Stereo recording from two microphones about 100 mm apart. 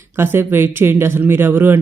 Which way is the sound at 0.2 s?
20° right (ahead or behind).